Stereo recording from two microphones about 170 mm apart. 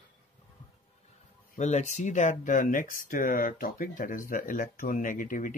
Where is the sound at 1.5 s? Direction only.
45° left (ahead or behind).